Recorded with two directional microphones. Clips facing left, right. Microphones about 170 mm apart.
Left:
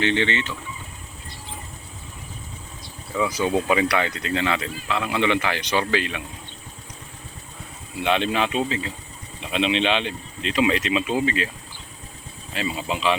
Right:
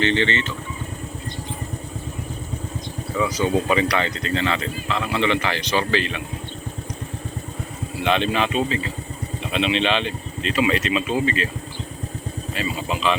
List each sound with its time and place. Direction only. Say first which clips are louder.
0.0 s speech: right 2 dB; 10° left (ahead or behind)
3.2 s speech: right 1 dB; 10° left (ahead or behind)
8.0 s speech: right 1 dB; 15° left (ahead or behind)
12.5 s speech: even; 15° left (ahead or behind)